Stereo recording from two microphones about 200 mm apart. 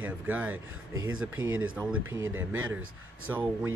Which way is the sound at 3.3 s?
10° right (ahead or behind).